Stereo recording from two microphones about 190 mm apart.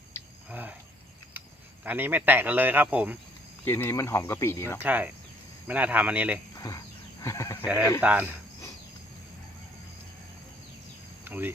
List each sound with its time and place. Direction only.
0.5 s speech: 10° right (ahead or behind)
1.8 s speech: 10° right (ahead or behind)
3.6 s speech: 10° left (ahead or behind)
4.8 s speech: 10° right (ahead or behind)
6.6 s a sound: 20° left (ahead or behind)
7.6 s speech: 10° right (ahead or behind)
11.3 s speech: 10° right (ahead or behind)